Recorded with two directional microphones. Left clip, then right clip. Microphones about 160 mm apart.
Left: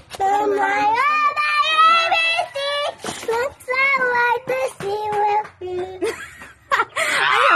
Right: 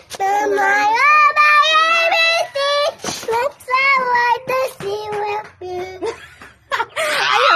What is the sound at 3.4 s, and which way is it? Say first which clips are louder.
Child singing: right 4 dB; 5° right (ahead or behind).